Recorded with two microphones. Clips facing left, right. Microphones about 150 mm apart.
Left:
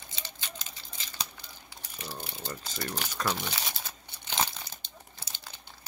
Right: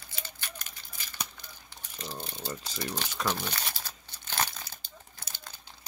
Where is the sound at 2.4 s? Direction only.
10° right (ahead or behind).